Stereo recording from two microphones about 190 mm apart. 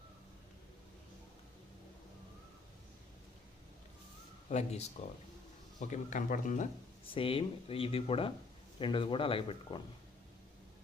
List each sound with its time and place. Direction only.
4.4 s speech: 35° left (ahead or behind)
7.1 s speech: 30° left (ahead or behind)